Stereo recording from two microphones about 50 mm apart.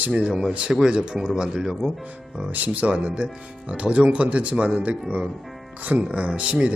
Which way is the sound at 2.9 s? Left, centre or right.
Right.